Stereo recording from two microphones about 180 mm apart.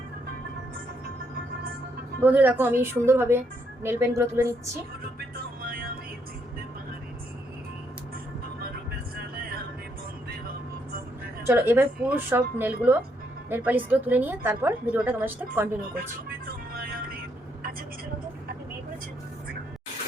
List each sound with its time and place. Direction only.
2.2 s a woman's voice: 10° right (ahead or behind)
5.6 s music: 55° right (ahead or behind)
11.4 s a woman's voice: 10° right (ahead or behind)